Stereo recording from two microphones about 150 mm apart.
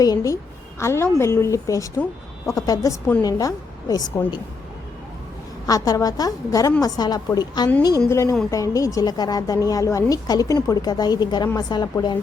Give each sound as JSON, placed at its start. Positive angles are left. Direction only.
{"t": 0.0, "sound": "a woman's voice", "side_deg": 25}
{"t": 5.6, "sound": "speech", "side_deg": 25}